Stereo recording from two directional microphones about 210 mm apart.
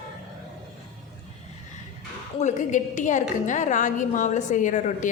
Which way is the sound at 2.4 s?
35° left (ahead or behind).